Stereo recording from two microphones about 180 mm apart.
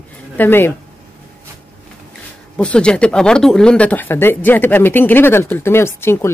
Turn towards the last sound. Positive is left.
turn(degrees=15)  # may be behind; listen again after turning